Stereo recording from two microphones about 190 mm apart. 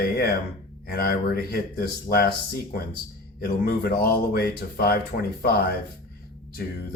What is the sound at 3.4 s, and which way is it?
Speech, 55° left (ahead or behind).